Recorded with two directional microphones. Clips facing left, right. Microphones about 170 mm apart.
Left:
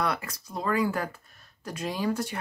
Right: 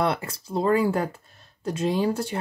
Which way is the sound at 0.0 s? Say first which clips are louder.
Right 5 dB; 30° right (ahead or behind).